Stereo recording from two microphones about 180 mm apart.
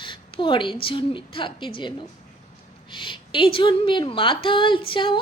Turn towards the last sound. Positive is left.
turn(degrees=25)  # may be behind; listen again after turning